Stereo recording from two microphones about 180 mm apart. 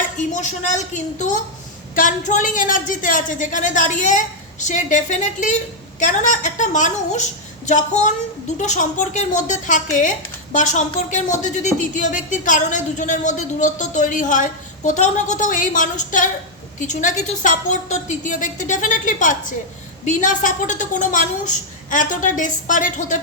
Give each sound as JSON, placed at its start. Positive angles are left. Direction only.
{"t": 0.3, "sound": "a woman's voice", "side_deg": 40}